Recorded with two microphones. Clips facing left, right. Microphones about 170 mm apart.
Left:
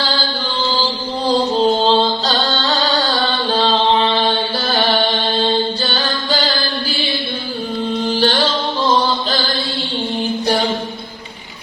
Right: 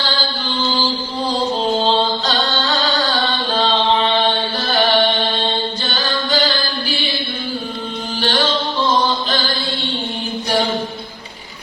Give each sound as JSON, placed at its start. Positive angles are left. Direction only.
{"t": 1.8, "sound": "music", "side_deg": 35}
{"t": 4.2, "sound": "mantra", "side_deg": 35}
{"t": 5.8, "sound": "music", "side_deg": 35}
{"t": 8.2, "sound": "music", "side_deg": 35}